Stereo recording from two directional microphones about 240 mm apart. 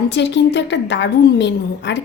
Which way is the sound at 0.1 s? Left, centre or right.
Left.